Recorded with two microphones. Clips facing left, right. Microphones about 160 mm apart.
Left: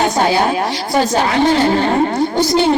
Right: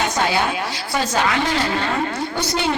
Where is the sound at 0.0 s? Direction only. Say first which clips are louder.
Left 6 dB; 35° left (ahead or behind).